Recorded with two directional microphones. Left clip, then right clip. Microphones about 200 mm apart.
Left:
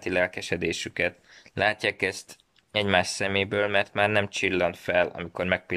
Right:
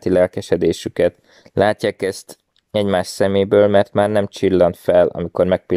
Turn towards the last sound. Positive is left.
turn(degrees=-35)  # may be behind; listen again after turning